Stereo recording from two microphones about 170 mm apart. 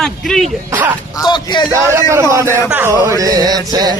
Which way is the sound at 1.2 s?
25° left (ahead or behind).